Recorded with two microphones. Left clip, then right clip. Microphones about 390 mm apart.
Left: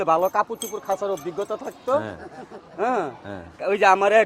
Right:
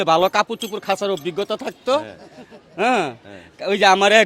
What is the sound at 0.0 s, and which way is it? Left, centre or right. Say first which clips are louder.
A man's voice: right 4 dB; right.